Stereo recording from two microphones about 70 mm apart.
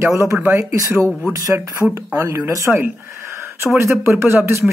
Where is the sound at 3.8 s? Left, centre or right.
Right.